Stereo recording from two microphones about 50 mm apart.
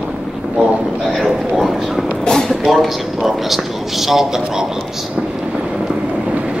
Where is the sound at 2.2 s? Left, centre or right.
Centre.